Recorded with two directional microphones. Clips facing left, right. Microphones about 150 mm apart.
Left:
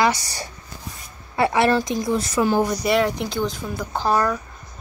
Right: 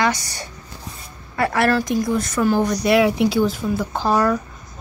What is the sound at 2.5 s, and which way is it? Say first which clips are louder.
Speech: right 4 dB; 5° left (ahead or behind).